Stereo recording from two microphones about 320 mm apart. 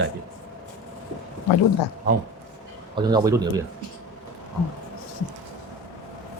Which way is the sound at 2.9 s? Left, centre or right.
Centre.